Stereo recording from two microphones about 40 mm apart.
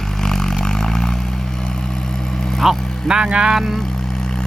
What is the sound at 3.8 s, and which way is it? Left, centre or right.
Vehicle, centre.